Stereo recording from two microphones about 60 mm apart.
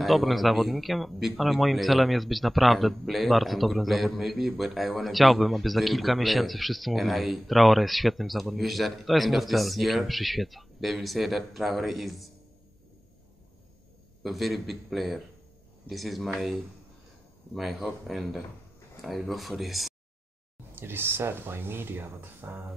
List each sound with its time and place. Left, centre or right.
0.0 s a man's voice: centre
14.2 s a man's voice: centre
17.6 s a man's voice: centre
20.7 s speech: right